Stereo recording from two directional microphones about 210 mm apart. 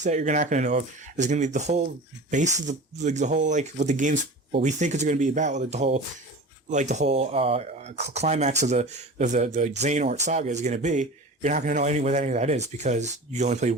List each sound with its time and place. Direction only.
0.0 s a man's voice: 35° right (ahead or behind)